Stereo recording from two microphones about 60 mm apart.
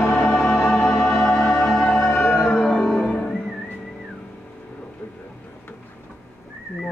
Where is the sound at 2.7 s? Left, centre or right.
Centre.